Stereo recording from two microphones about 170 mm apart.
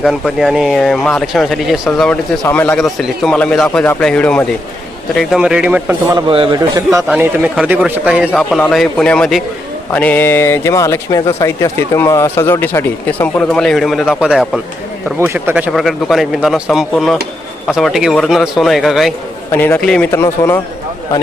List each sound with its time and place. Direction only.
0.0 s speech: centre (ahead or behind)
2.4 s speech: 10° left (ahead or behind); by 6.1 s 10° right (ahead or behind)
6.1 s a man's voice: 30° right (ahead or behind)
7.1 s a man's voice: 10° right (ahead or behind)
19.5 s speech: 10° left (ahead or behind)